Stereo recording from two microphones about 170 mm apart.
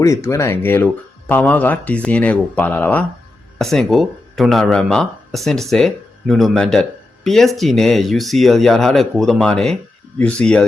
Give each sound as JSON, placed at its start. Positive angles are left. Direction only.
{"t": 0.0, "sound": "speech", "side_deg": 15}